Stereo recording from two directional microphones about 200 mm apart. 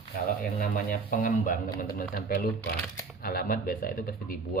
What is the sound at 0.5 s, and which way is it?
Speech, 40° left (ahead or behind).